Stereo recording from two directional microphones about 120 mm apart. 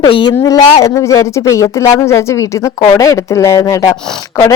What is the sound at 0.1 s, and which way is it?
Speech, 45° left (ahead or behind).